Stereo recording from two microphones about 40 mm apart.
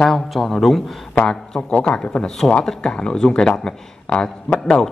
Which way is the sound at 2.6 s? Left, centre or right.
Centre.